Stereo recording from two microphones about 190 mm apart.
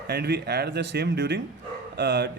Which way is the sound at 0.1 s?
60° right (ahead or behind).